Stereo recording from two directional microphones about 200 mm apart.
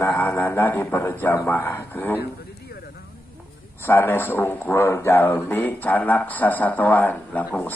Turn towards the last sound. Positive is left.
turn(degrees=10)  # may be behind; listen again after turning